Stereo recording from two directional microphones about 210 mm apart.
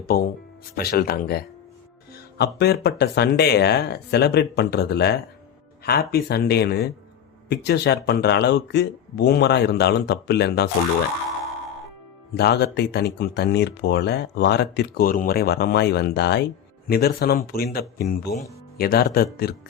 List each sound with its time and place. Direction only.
0.0 s speech: 45° left (ahead or behind)
12.3 s speech: 50° left (ahead or behind)